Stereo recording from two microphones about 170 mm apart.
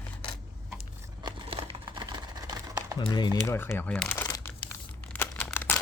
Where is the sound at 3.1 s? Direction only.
25° left (ahead or behind).